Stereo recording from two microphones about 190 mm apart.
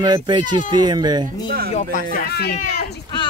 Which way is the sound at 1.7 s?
45° left (ahead or behind).